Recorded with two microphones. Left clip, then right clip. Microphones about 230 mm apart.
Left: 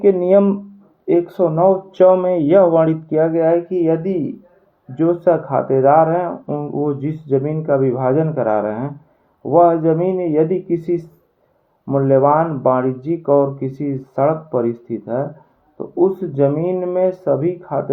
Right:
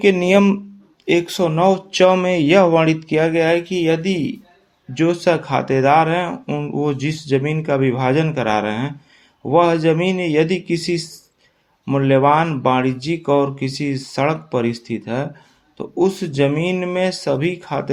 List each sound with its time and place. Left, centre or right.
0.1 s speech: right
1.0 s speech: right
4.9 s speech: right